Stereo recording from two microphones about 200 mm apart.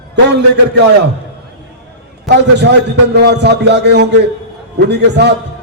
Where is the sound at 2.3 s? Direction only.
60° right (ahead or behind).